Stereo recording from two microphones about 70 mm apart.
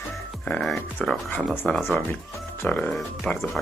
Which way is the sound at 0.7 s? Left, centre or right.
Centre.